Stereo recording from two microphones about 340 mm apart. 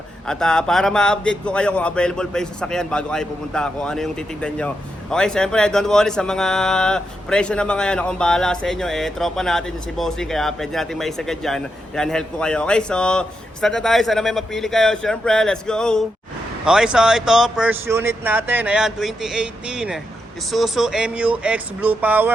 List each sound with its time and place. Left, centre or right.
0.3 s speech: centre